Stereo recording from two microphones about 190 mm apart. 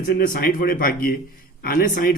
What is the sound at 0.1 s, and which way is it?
Speech, 50° left (ahead or behind).